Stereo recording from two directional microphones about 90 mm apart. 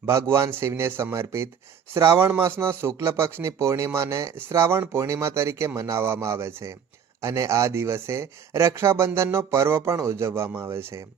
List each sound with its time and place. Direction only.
0.1 s speech: 30° right (ahead or behind)